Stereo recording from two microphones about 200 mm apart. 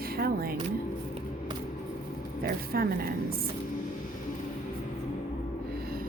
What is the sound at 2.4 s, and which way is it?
Speech, 50° right (ahead or behind).